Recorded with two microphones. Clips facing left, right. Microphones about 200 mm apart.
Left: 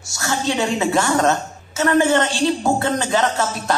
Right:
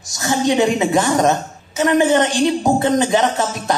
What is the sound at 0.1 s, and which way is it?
A woman's voice, 15° right (ahead or behind).